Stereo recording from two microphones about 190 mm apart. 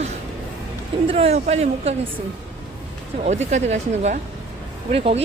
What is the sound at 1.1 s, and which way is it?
Speech, 30° right (ahead or behind).